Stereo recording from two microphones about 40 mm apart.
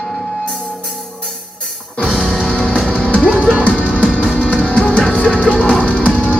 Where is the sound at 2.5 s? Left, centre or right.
Left.